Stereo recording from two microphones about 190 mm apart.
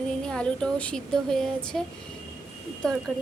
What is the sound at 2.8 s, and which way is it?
Speech, 5° left (ahead or behind).